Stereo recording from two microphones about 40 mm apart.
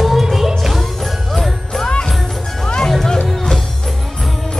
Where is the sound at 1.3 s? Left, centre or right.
Centre.